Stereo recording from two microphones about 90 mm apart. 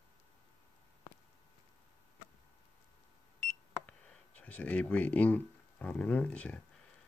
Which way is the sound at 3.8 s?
15° left (ahead or behind).